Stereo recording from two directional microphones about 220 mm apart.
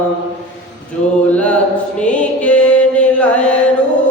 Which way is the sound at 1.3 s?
5° left (ahead or behind).